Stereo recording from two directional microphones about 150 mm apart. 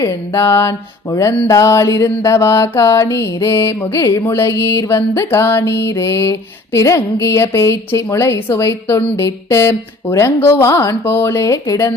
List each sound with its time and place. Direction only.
0.0 s a woman's voice: 20° left (ahead or behind)
1.1 s mantra: 20° left (ahead or behind)
6.7 s a woman's voice: 20° left (ahead or behind)